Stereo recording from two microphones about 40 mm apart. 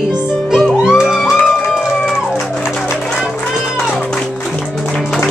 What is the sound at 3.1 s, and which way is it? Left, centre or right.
Music, centre.